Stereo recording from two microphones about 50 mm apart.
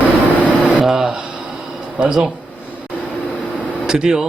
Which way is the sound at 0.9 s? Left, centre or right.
Centre.